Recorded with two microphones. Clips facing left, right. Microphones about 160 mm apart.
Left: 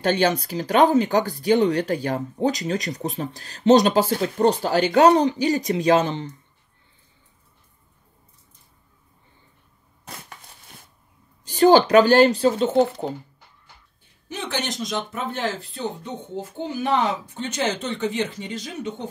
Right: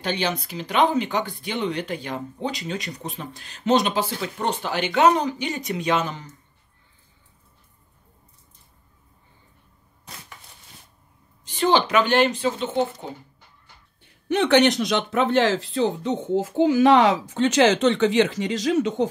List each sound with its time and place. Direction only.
0.0 s speech: 45° left (ahead or behind)
11.4 s speech: 40° left (ahead or behind)
14.3 s speech: 65° right (ahead or behind); by 19.0 s 90° right